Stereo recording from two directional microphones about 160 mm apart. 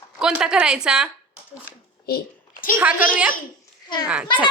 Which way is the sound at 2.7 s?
10° right (ahead or behind).